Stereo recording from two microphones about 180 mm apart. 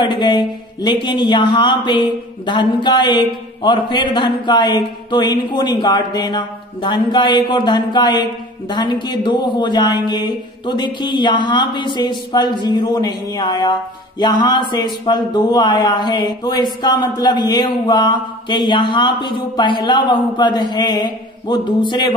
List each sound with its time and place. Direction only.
0.0 s speech: 25° left (ahead or behind)